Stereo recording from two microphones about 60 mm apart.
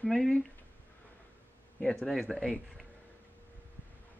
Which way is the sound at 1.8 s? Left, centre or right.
Centre.